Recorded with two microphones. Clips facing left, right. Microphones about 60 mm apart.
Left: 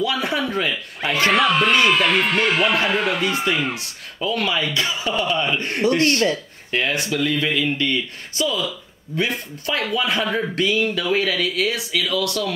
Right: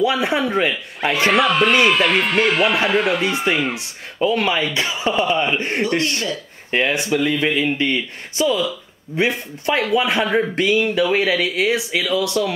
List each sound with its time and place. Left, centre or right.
0.0 s speech: right
1.3 s speech: centre
3.7 s speech: right
6.0 s speech: left
6.7 s speech: right